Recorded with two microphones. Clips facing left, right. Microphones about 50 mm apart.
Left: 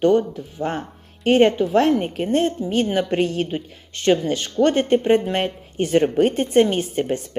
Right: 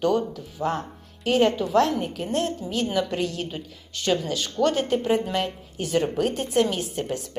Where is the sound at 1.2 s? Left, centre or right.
Left.